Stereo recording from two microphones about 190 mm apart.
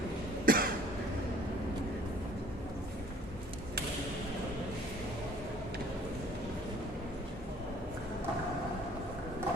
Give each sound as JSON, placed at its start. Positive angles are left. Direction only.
{"t": 0.4, "sound": "cough", "side_deg": -50}